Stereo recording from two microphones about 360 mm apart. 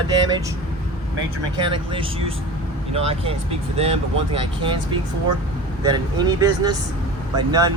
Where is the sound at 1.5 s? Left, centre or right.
Centre.